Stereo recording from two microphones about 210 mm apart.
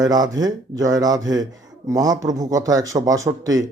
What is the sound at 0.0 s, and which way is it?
A man's voice, 20° right (ahead or behind).